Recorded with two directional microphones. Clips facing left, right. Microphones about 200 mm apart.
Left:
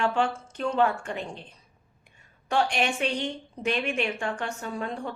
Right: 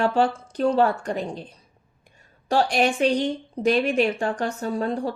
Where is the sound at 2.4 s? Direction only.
35° right (ahead or behind).